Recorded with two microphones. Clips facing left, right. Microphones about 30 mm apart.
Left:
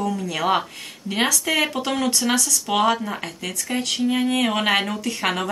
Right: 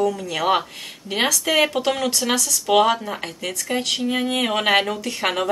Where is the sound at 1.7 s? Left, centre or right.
Centre.